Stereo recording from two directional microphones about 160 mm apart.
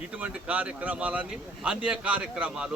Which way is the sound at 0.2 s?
10° right (ahead or behind).